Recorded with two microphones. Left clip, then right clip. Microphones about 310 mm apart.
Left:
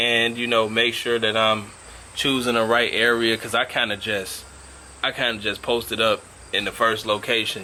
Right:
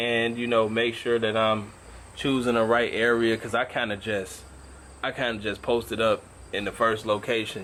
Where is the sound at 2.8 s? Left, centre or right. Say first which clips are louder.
Left 4 dB; centre.